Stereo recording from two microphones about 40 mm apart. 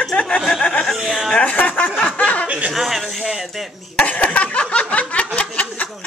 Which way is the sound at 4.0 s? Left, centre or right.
Left.